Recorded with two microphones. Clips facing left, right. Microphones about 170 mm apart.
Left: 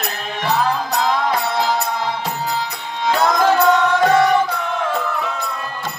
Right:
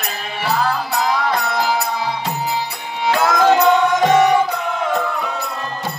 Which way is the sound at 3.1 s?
10° right (ahead or behind).